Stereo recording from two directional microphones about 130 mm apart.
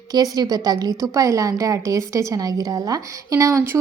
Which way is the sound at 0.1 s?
30° right (ahead or behind).